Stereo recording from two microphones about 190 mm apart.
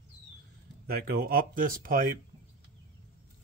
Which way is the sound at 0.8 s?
55° right (ahead or behind).